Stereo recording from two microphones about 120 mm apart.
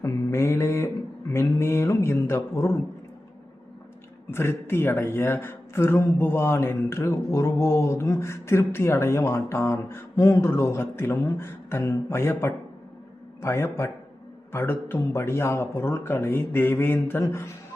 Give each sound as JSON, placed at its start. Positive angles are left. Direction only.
{"t": 0.0, "sound": "mantra", "side_deg": 25}
{"t": 1.3, "sound": "speech", "side_deg": 20}
{"t": 4.3, "sound": "speech", "side_deg": 20}